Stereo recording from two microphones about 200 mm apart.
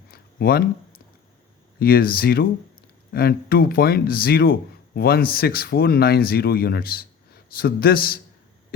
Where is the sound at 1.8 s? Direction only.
45° left (ahead or behind).